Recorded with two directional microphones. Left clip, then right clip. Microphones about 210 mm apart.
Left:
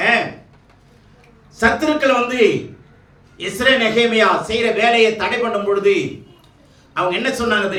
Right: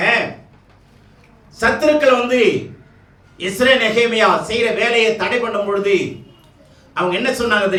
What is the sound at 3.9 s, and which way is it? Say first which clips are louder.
A man's voice: even; 5° left (ahead or behind).